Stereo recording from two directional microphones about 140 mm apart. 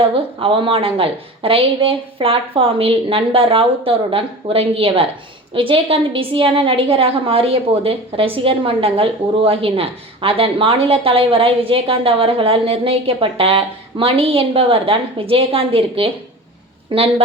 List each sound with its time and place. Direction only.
0.0 s a woman's voice: 40° right (ahead or behind)